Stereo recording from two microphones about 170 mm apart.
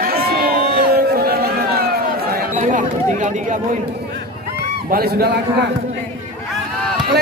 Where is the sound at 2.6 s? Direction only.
50° right (ahead or behind).